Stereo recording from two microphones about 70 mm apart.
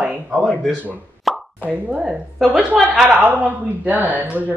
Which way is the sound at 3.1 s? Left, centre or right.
Right.